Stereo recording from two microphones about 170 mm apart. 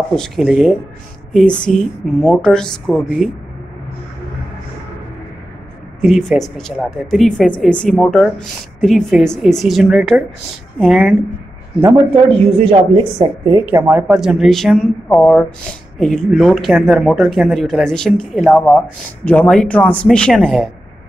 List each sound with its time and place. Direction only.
0.1 s a woman's voice: 5° left (ahead or behind)
1.3 s a woman's voice: 5° left (ahead or behind)
5.9 s a woman's voice: centre (ahead or behind)
12.5 s a woman's voice: 30° right (ahead or behind)
13.5 s a woman's voice: 15° right (ahead or behind); by 20.7 s centre (ahead or behind)